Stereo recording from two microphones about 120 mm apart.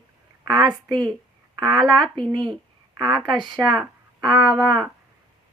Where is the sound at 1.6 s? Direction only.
35° right (ahead or behind).